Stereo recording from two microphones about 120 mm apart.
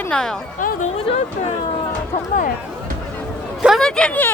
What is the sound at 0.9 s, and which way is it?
Speech, 60° left (ahead or behind).